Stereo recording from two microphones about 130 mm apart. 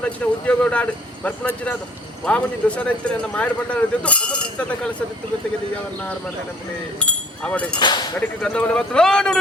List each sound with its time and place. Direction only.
0.0 s a man's voice: 10° left (ahead or behind)
7.0 s speech: 10° left (ahead or behind)
7.8 s speech: 35° left (ahead or behind)
8.4 s a man's voice: 5° left (ahead or behind)